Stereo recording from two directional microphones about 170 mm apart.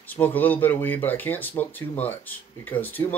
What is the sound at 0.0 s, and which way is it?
Speech, 10° left (ahead or behind).